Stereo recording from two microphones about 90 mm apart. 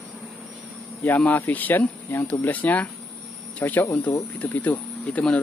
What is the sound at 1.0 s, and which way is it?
Speech, 20° left (ahead or behind).